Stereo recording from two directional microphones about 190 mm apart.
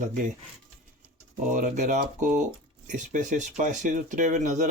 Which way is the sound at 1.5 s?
40° right (ahead or behind).